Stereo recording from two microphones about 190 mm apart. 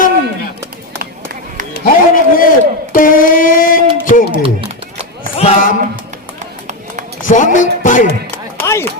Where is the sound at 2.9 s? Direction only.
45° left (ahead or behind).